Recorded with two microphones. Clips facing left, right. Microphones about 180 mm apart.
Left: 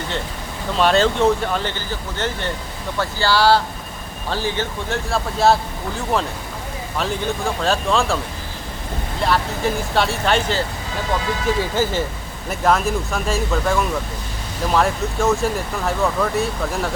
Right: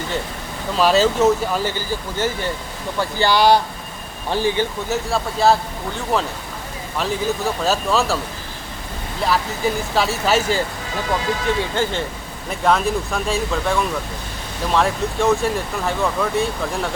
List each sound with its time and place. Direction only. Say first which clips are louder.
0.8 s speech: right 1 dB; 5° right (ahead or behind)
4.9 s speech: right 1 dB; centre (ahead or behind)
9.2 s speech: even; centre (ahead or behind)
11.4 s speech: left 4 dB; 5° left (ahead or behind)